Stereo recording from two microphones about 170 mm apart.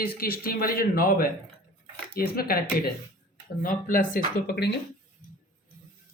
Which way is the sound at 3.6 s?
55° left (ahead or behind).